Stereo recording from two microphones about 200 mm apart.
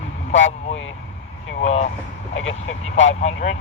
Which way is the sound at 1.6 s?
30° left (ahead or behind).